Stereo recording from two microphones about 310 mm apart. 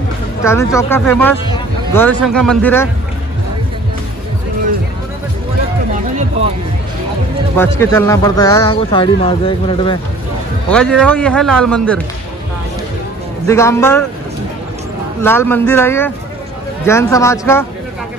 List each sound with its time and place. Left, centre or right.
0.4 s speech: centre
6.1 s a sound: right
7.5 s speech: centre
10.7 s speech: centre
13.5 s speech: centre
15.2 s speech: centre